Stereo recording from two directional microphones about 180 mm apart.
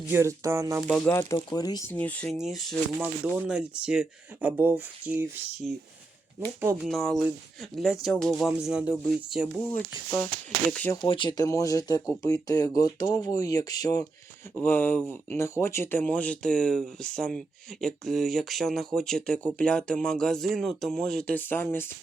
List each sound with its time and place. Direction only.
0.1 s speech: 15° right (ahead or behind)
0.9 s speech: 5° left (ahead or behind)
1.4 s speech: 25° left (ahead or behind)
1.9 s speech: 10° left (ahead or behind); by 5.1 s 10° right (ahead or behind)
6.8 s speech: centre (ahead or behind)
10.7 s speech: 5° left (ahead or behind)
11.0 s speech: 30° left (ahead or behind); by 21.9 s 10° left (ahead or behind)